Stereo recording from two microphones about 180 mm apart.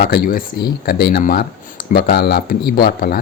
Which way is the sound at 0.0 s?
55° left (ahead or behind).